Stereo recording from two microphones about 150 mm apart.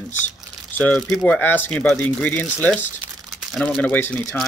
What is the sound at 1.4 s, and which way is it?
Speech, 15° left (ahead or behind).